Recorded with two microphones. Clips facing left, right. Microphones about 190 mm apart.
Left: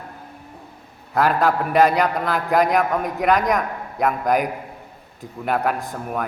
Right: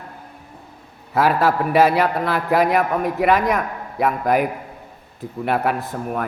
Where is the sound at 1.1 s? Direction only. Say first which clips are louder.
Right 1 dB; 5° right (ahead or behind).